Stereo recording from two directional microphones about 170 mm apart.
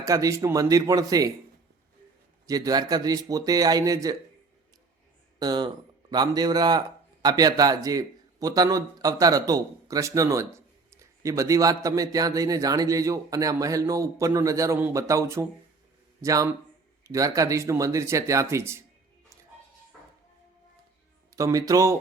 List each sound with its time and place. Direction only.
0.0 s speech: 20° right (ahead or behind)
2.5 s speech: 20° right (ahead or behind)
5.4 s speech: 25° right (ahead or behind)
21.3 s speech: 20° right (ahead or behind)